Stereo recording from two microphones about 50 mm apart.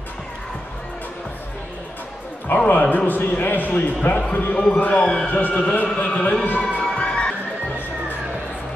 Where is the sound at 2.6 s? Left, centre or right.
Left.